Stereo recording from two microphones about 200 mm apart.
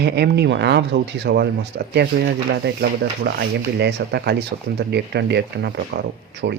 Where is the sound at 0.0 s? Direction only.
55° right (ahead or behind).